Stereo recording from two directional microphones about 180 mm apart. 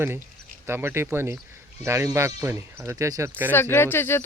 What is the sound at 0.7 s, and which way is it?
Speech, 15° right (ahead or behind).